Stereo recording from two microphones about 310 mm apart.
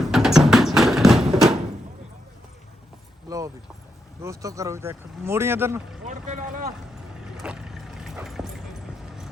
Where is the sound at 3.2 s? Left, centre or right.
Centre.